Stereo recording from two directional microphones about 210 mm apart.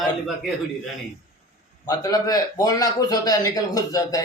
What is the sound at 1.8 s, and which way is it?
A man's voice, 20° left (ahead or behind).